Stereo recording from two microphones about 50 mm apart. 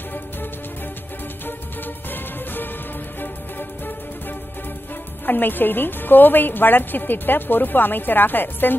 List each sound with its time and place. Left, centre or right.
2.0 s music: left
5.2 s a woman's voice: left